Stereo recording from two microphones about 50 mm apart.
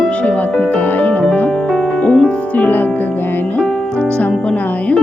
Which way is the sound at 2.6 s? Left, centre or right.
Left.